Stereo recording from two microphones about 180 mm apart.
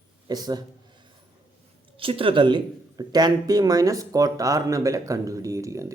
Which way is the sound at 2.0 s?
30° right (ahead or behind).